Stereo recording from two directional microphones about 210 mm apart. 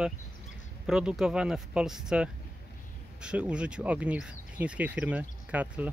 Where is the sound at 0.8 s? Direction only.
5° right (ahead or behind).